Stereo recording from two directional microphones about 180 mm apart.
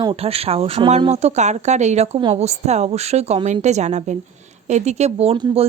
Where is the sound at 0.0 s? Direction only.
30° right (ahead or behind).